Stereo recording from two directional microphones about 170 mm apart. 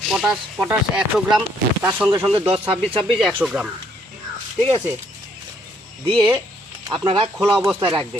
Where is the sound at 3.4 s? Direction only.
5° right (ahead or behind).